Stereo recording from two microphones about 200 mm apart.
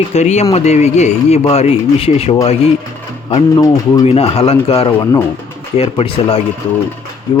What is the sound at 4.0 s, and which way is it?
Speech, 30° left (ahead or behind).